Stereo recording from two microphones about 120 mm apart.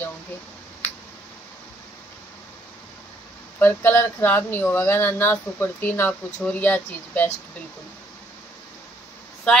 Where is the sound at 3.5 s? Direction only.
15° left (ahead or behind).